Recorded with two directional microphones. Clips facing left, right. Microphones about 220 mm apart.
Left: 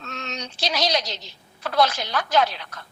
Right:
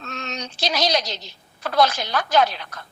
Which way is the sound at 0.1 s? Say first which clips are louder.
Right 2 dB; 45° right (ahead or behind).